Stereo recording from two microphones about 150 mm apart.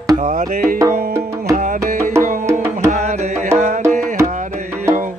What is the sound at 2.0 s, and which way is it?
Music, 15° right (ahead or behind).